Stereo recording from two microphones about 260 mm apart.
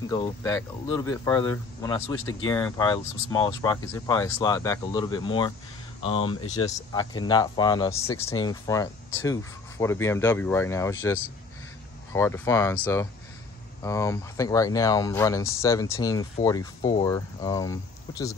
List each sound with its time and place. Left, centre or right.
0.1 s speech: centre